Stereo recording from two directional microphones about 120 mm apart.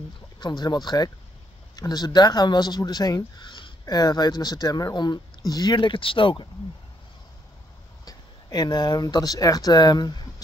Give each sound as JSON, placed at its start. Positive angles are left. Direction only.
{"t": 0.4, "sound": "speech", "side_deg": 35}
{"t": 8.0, "sound": "speech", "side_deg": 30}